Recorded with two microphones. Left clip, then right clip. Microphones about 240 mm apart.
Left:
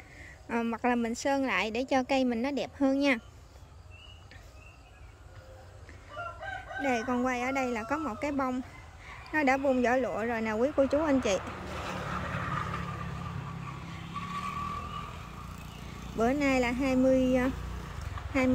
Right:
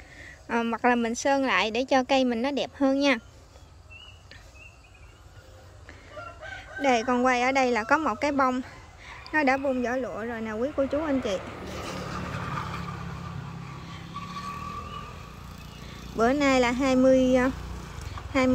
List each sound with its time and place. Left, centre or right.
0.2 s a woman's voice: centre
6.8 s a woman's voice: centre
11.4 s a sound: right
13.9 s vehicle: centre
15.9 s speech: centre